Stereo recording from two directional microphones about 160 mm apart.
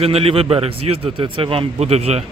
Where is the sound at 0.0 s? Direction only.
40° right (ahead or behind).